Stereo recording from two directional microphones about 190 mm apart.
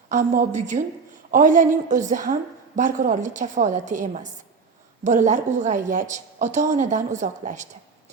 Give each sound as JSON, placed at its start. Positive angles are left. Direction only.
{"t": 0.1, "sound": "a woman's voice", "side_deg": -40}